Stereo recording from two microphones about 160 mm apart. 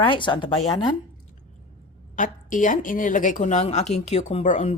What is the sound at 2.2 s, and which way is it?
A woman's voice, 55° left (ahead or behind).